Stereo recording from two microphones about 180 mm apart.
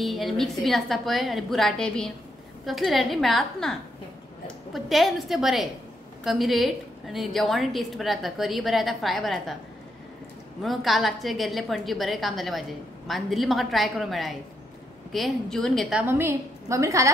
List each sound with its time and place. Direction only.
0.0 s a woman's voice: centre (ahead or behind)
4.7 s a woman's voice: centre (ahead or behind)
10.6 s a woman's voice: centre (ahead or behind)
16.0 s a woman's voice: 10° right (ahead or behind)